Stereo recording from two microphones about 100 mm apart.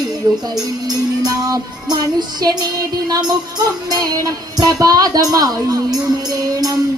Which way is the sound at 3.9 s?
40° right (ahead or behind).